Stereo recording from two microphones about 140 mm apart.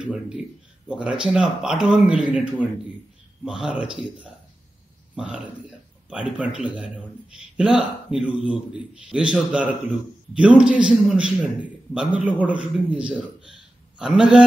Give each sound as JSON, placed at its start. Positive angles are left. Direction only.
{"t": 0.0, "sound": "a man's voice", "side_deg": -5}
{"t": 5.1, "sound": "a man's voice", "side_deg": -5}